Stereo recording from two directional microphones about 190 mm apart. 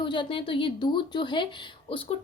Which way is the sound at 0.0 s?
25° left (ahead or behind).